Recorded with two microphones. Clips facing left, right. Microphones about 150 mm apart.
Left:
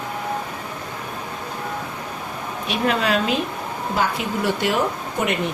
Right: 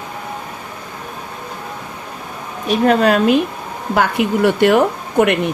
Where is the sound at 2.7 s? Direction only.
45° right (ahead or behind).